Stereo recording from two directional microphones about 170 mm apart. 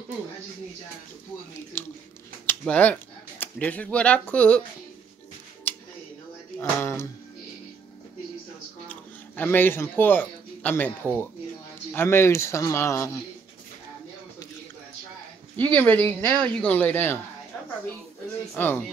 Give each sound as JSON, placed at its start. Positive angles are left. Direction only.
{"t": 1.7, "sound": "a man's voice", "side_deg": 15}
{"t": 5.7, "sound": "a sound", "side_deg": 10}
{"t": 6.6, "sound": "a man's voice", "side_deg": 15}
{"t": 9.4, "sound": "a man's voice", "side_deg": 10}
{"t": 15.5, "sound": "a man's voice", "side_deg": 10}
{"t": 18.5, "sound": "a man's voice", "side_deg": 10}